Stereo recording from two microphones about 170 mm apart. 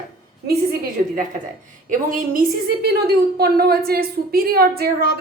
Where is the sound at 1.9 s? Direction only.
50° right (ahead or behind).